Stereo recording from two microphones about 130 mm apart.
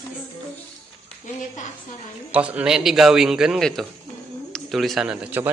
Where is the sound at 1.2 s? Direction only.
70° left (ahead or behind).